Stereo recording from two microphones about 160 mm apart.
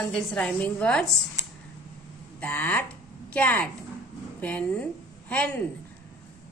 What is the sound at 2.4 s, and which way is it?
A woman's voice, 10° left (ahead or behind).